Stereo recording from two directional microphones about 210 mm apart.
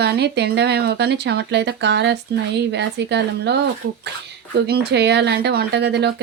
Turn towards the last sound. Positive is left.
turn(degrees=-55)  # may be behind; listen again after turning